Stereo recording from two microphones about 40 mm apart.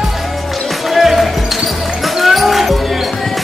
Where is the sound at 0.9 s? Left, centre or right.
Centre.